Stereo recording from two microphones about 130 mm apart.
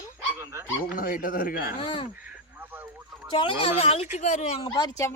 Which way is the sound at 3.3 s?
45° left (ahead or behind).